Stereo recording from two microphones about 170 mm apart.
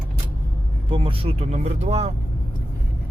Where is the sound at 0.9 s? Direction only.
30° right (ahead or behind).